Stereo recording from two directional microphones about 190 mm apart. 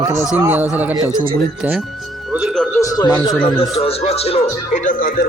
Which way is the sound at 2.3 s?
5° right (ahead or behind).